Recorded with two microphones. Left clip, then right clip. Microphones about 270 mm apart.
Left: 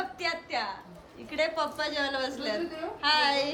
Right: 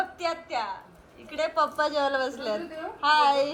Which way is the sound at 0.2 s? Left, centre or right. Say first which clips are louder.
Right 2 dB; centre.